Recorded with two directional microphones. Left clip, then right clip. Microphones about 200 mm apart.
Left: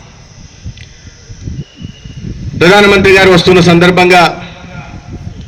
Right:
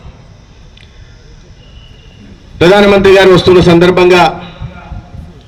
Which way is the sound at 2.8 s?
55° right (ahead or behind).